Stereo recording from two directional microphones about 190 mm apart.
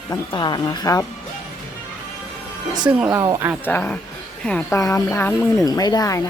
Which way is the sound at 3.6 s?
10° left (ahead or behind).